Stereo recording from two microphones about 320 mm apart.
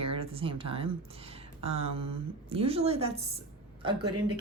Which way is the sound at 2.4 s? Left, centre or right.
Centre.